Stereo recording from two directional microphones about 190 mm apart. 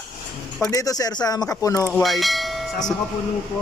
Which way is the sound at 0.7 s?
20° left (ahead or behind).